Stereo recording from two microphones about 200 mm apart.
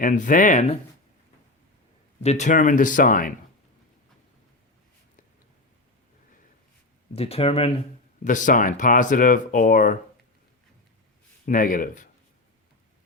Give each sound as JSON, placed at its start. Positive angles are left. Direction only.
{"t": 0.0, "sound": "speech", "side_deg": 40}
{"t": 2.2, "sound": "speech", "side_deg": 35}
{"t": 7.1, "sound": "speech", "side_deg": 30}
{"t": 8.2, "sound": "speech", "side_deg": 40}
{"t": 11.4, "sound": "speech", "side_deg": 45}